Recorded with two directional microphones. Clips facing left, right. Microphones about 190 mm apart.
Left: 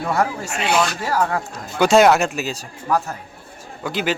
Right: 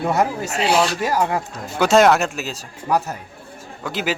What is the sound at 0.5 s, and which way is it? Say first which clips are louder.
Speech: right 2 dB; 35° right (ahead or behind).